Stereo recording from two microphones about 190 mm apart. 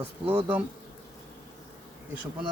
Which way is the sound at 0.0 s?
10° right (ahead or behind).